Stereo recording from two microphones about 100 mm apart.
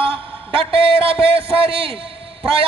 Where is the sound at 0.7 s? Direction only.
65° right (ahead or behind).